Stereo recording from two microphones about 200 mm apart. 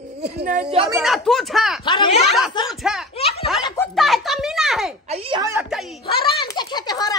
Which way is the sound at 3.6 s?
15° left (ahead or behind).